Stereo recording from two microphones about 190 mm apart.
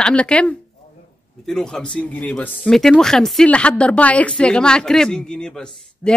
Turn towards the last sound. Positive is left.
turn(degrees=5)  # may be behind; listen again after turning